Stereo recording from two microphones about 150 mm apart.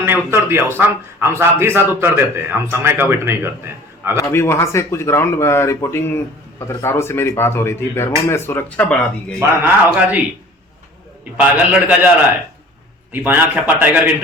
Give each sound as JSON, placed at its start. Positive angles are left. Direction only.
{"t": 0.0, "sound": "a man's voice", "side_deg": -15}
{"t": 4.2, "sound": "speech", "side_deg": 15}
{"t": 9.4, "sound": "a man's voice", "side_deg": -15}
{"t": 11.3, "sound": "a man's voice", "side_deg": -10}
{"t": 13.2, "sound": "a man's voice", "side_deg": -10}